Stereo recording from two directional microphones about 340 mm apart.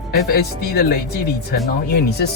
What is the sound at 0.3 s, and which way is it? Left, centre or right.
Speech, left.